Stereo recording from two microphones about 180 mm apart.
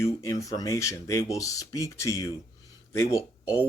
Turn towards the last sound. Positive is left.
turn(degrees=15)  # may be behind; listen again after turning